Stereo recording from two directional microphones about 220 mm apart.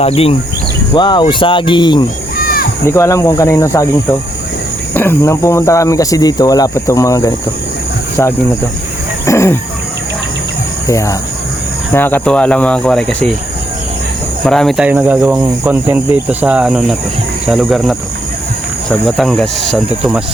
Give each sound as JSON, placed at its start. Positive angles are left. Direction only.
{"t": 0.9, "sound": "speech", "side_deg": 20}
{"t": 2.4, "sound": "a sound", "side_deg": 40}
{"t": 2.8, "sound": "speech", "side_deg": 15}
{"t": 4.9, "sound": "speech", "side_deg": 10}
{"t": 9.2, "sound": "wild animals", "side_deg": 10}
{"t": 10.8, "sound": "speech", "side_deg": 15}
{"t": 14.4, "sound": "speech", "side_deg": 5}